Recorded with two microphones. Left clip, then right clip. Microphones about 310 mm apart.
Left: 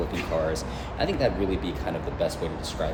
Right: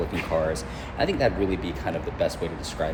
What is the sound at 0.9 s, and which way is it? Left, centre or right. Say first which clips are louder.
Speech: right 2 dB; right.